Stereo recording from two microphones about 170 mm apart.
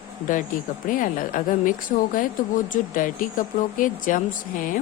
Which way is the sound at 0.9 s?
50° left (ahead or behind).